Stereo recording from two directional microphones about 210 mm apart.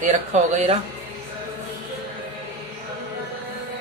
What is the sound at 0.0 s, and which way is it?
Speech, 30° right (ahead or behind).